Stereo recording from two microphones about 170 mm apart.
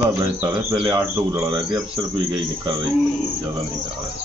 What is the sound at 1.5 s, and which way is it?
Speech, 25° right (ahead or behind).